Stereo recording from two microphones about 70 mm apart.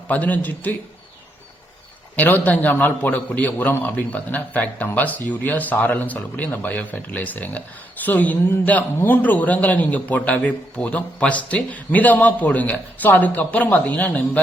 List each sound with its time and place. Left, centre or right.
0.1 s a man's voice: left
2.1 s a man's voice: left